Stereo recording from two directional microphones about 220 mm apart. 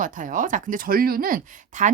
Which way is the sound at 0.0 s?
35° right (ahead or behind).